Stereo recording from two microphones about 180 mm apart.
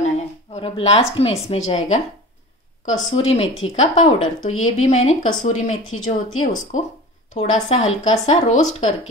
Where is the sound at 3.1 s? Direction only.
35° left (ahead or behind).